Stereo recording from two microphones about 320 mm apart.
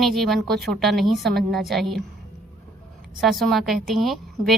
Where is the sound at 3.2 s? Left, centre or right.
Centre.